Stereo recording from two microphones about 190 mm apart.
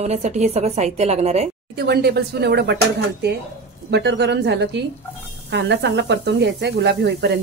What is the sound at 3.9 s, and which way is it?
Speech, 65° right (ahead or behind).